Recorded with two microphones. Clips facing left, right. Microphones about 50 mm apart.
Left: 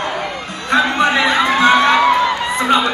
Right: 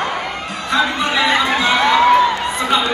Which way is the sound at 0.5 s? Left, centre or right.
Left.